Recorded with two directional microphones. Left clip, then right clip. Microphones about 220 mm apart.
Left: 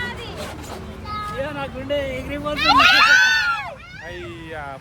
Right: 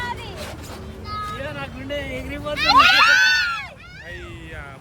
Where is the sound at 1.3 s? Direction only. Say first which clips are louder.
Left 4 dB; 5° left (ahead or behind).